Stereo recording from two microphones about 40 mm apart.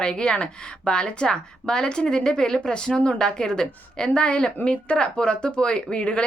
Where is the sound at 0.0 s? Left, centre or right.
Centre.